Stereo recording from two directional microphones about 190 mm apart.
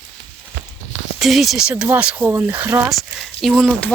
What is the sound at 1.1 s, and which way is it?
Speech, centre (ahead or behind).